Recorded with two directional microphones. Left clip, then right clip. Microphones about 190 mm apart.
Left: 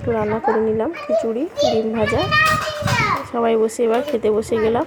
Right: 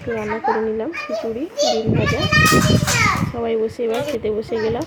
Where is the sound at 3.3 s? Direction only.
20° left (ahead or behind).